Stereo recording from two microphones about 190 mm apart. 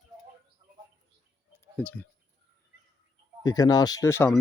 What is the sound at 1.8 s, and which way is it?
Speech, 10° left (ahead or behind).